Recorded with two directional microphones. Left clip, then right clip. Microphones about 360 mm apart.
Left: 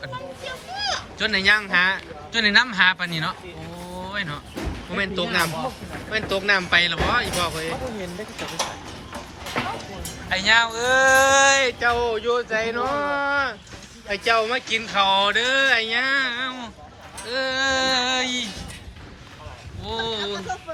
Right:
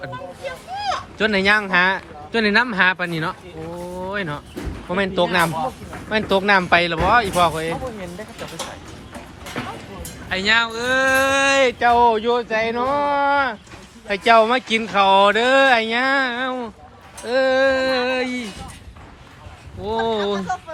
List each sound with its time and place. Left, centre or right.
0.4 s children playing: centre
1.2 s speech: centre
4.0 s vehicle: centre
4.9 s speech: centre
10.2 s speech: centre
19.8 s speech: centre